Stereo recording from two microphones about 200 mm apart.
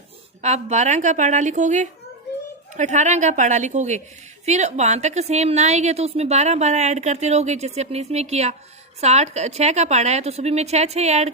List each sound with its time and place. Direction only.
0.4 s a woman's voice: 35° right (ahead or behind)